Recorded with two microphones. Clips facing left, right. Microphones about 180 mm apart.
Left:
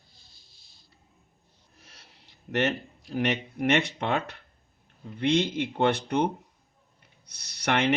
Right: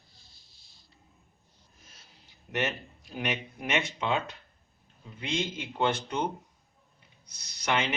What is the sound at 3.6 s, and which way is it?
Speech, 65° left (ahead or behind).